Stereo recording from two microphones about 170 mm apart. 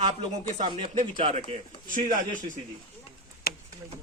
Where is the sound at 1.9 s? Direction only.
50° right (ahead or behind).